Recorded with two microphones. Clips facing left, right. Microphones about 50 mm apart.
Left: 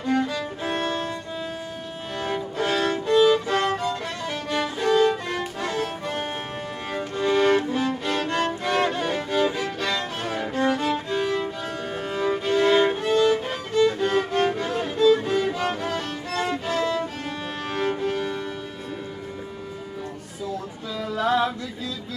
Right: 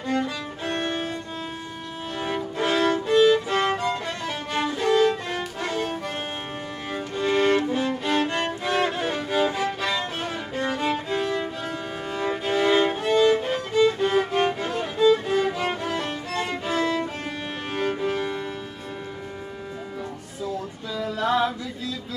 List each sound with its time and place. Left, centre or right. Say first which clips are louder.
0.1 s music: left 2 dB; centre
0.8 s music: left 1 dB; centre
2.2 s violin: even; centre
2.9 s music: even; centre
4.7 s music: even; centre
10.8 s music: even; centre
11.1 s music: left 1 dB; centre
21.0 s music: left 1 dB; centre